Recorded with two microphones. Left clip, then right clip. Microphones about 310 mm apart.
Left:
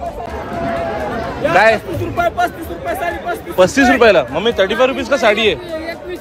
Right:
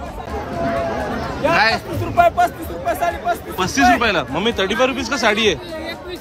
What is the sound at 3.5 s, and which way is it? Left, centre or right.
A man's voice, centre.